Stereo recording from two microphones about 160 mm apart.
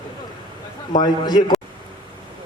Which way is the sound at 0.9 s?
25° left (ahead or behind).